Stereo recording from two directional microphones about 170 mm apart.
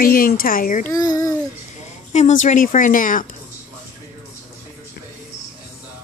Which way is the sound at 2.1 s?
45° left (ahead or behind).